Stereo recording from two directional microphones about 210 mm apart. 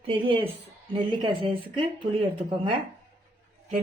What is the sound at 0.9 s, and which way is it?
Speech, 25° right (ahead or behind).